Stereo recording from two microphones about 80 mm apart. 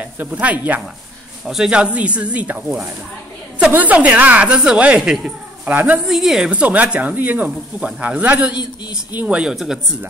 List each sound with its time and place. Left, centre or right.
0.0 s speech: centre
1.4 s speech: centre
5.7 s speech: right
6.0 s speech: centre; by 9.4 s right
9.4 s speech: centre